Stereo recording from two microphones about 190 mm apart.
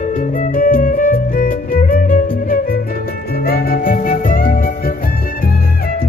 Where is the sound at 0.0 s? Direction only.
40° left (ahead or behind).